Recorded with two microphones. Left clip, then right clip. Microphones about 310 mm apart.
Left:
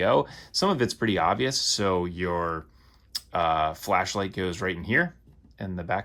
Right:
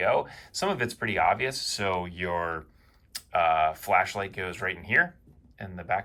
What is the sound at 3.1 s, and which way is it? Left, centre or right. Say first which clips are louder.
Speech: right 1 dB; centre.